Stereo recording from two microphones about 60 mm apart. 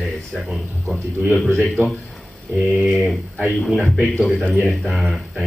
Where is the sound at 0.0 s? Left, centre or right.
Centre.